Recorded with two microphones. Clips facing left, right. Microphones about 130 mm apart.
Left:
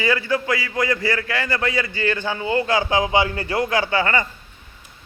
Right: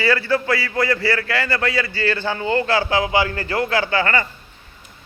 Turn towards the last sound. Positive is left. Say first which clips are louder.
# even
turn(degrees=15)  # may be behind; listen again after turning